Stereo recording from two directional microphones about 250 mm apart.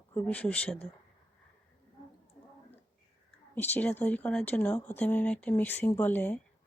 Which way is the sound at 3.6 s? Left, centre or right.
Centre.